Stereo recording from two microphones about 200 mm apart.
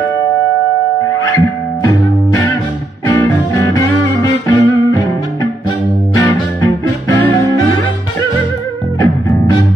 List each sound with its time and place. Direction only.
1.0 s music: 15° left (ahead or behind)
3.1 s music: 15° left (ahead or behind)